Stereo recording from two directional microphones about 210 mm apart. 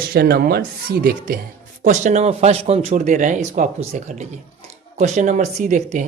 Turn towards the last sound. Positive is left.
turn(degrees=-35)  # may be behind; listen again after turning